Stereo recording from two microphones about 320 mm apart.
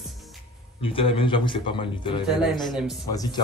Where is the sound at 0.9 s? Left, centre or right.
Centre.